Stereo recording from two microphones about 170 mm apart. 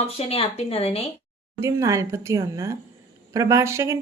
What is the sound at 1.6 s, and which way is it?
Speech, 15° right (ahead or behind).